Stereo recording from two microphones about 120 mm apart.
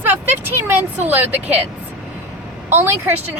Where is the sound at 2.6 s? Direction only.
20° right (ahead or behind).